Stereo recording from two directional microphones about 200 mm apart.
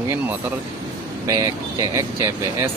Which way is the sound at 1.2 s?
15° right (ahead or behind).